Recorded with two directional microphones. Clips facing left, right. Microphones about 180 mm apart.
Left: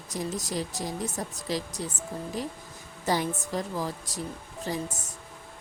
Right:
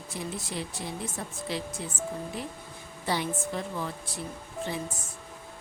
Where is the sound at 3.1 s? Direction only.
40° left (ahead or behind).